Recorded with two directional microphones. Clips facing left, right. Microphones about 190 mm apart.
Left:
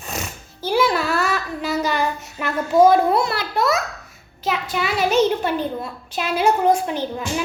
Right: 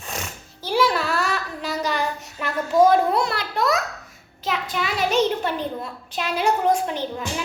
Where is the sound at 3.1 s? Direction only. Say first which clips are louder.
Left 3 dB; 5° left (ahead or behind).